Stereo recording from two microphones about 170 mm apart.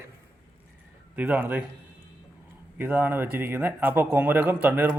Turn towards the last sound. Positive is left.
turn(degrees=-10)  # may be behind; listen again after turning